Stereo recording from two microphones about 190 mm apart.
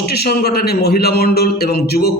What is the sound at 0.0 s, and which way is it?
A man's voice, 60° left (ahead or behind).